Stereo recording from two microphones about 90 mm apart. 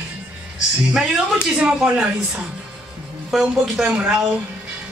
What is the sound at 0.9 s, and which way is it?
Speech, 10° right (ahead or behind).